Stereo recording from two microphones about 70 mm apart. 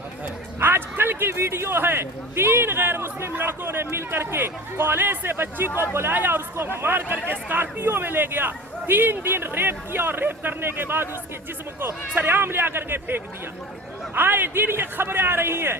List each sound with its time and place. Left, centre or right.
0.6 s a man's voice: right